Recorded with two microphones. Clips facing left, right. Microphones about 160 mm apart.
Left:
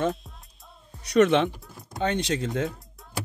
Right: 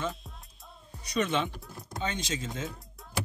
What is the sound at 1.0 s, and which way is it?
Speech, 70° left (ahead or behind).